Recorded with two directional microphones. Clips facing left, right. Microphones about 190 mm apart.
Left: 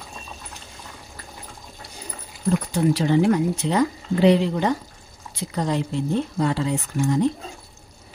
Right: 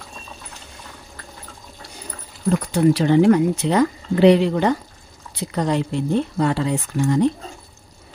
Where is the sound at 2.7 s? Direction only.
65° right (ahead or behind).